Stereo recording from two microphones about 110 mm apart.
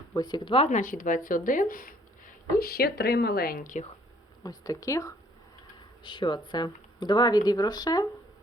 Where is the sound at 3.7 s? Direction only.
90° left.